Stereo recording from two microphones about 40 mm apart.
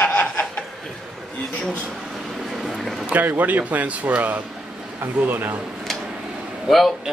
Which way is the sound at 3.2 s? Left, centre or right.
Right.